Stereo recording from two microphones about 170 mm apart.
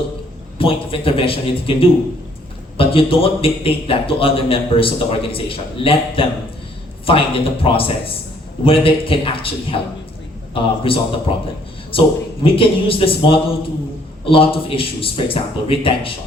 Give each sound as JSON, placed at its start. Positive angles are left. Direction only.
{"t": 0.6, "sound": "a man's voice", "side_deg": 35}